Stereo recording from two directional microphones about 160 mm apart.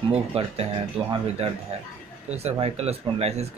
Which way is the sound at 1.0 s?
5° right (ahead or behind).